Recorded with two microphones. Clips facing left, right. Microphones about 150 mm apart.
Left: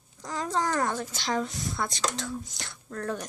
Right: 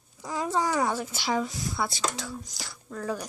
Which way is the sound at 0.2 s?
10° right (ahead or behind).